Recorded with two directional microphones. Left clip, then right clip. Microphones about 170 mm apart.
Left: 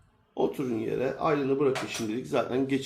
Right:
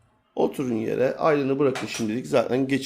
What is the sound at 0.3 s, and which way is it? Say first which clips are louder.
Speech: right 4 dB; 50° right (ahead or behind).